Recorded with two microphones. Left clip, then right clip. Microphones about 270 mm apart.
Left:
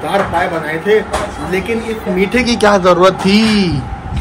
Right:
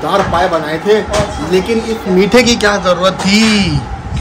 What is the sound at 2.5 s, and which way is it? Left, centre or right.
Speech, centre.